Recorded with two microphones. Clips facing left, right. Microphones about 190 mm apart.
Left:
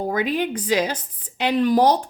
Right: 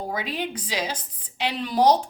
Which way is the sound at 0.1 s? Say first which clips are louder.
Left 7 dB; 55° left (ahead or behind).